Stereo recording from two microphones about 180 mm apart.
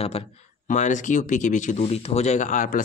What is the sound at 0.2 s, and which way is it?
Speech, 35° left (ahead or behind).